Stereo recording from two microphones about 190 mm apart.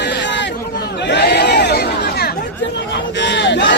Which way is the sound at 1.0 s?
65° left (ahead or behind).